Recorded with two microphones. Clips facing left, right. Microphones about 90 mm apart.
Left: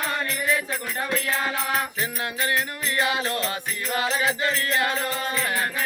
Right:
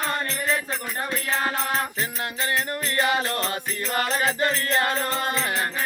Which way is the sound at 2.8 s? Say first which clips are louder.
Right 2 dB; 35° right (ahead or behind).